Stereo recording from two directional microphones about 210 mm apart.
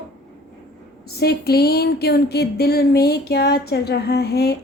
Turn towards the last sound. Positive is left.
turn(degrees=50)  # may be behind; listen again after turning